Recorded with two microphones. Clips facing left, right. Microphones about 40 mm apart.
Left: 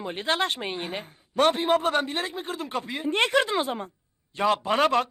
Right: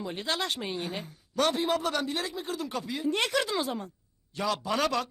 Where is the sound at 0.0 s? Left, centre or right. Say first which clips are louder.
Left 5 dB; left.